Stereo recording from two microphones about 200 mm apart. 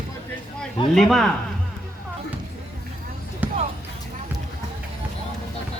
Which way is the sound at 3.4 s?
10° right (ahead or behind).